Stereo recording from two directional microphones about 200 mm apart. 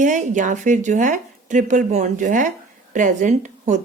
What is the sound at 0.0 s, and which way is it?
Speech, 40° right (ahead or behind).